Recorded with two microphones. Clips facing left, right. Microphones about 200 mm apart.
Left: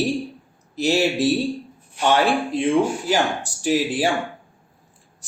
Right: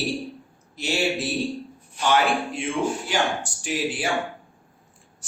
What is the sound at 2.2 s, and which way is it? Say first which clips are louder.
A man's voice: left 5 dB; 35° left (ahead or behind).